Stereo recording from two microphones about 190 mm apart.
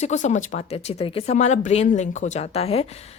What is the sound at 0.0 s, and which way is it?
Speech, 40° left (ahead or behind).